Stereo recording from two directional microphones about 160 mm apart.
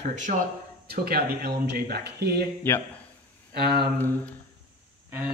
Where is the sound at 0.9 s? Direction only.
75° right (ahead or behind).